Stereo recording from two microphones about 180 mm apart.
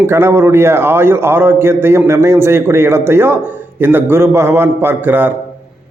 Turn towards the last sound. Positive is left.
turn(degrees=-10)  # may be behind; listen again after turning